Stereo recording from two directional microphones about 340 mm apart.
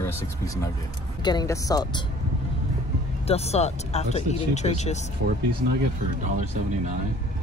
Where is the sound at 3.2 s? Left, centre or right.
Centre.